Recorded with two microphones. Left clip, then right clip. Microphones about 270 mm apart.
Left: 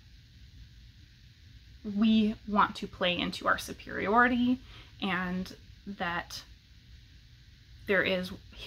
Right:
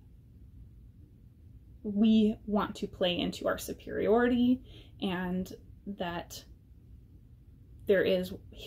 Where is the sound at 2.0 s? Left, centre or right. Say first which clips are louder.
Right 1 dB; left.